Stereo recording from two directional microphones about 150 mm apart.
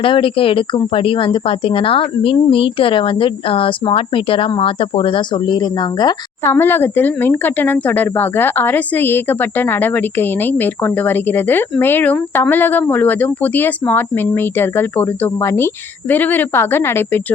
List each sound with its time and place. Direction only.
0.0 s a woman's voice: 35° left (ahead or behind)
6.4 s speech: 15° left (ahead or behind)